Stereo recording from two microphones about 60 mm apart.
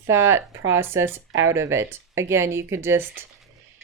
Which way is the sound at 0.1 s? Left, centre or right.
Right.